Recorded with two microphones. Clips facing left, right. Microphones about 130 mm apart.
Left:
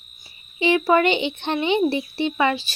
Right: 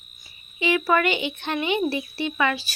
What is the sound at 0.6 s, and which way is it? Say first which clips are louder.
Speech: left 4 dB; 30° left (ahead or behind).